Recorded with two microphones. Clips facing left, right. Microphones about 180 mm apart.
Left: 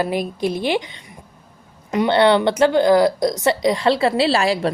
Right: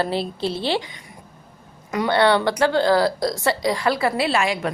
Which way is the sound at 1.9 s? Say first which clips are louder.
Left 3 dB; 25° left (ahead or behind).